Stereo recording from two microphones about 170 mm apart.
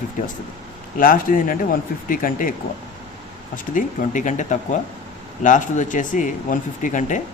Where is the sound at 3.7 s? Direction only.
50° left (ahead or behind).